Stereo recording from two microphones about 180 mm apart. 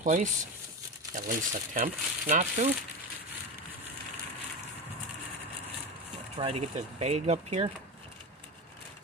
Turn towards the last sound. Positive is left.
turn(degrees=-35)  # may be behind; listen again after turning